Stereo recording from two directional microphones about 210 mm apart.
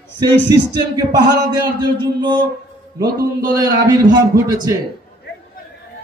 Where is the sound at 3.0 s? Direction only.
45° right (ahead or behind).